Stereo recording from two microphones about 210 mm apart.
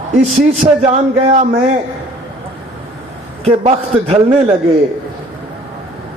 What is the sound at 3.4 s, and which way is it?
A man's voice, 30° right (ahead or behind).